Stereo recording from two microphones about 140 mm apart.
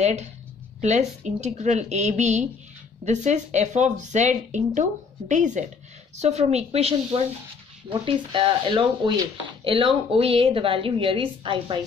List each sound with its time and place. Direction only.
0.0 s a woman's voice: 50° right (ahead or behind)
6.1 s a woman's voice: 50° right (ahead or behind)